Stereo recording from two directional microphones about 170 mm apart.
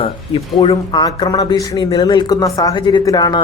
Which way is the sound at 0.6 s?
30° left (ahead or behind).